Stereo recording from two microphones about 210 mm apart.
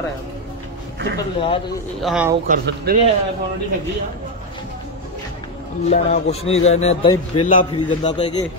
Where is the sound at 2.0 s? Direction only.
Centre (ahead or behind).